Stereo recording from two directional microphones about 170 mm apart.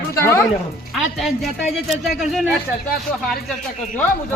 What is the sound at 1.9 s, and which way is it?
Speech, centre (ahead or behind).